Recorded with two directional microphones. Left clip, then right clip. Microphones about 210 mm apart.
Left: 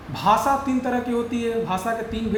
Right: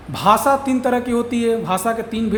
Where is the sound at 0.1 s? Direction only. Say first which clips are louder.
Right 4 dB; 50° right (ahead or behind).